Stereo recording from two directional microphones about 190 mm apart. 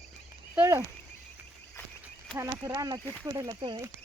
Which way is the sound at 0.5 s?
15° right (ahead or behind).